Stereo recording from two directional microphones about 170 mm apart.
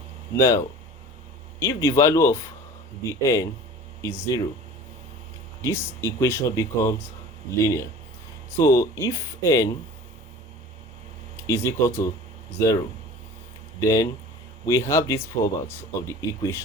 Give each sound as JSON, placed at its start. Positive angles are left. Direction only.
{"t": 0.3, "sound": "speech", "side_deg": 15}
{"t": 1.6, "sound": "speech", "side_deg": 15}
{"t": 5.6, "sound": "speech", "side_deg": 15}
{"t": 11.4, "sound": "speech", "side_deg": 15}